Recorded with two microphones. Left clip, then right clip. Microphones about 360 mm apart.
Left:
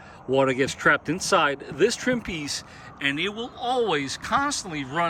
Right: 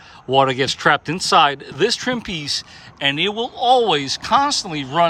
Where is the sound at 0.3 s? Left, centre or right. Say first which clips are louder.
Right 6 dB; centre.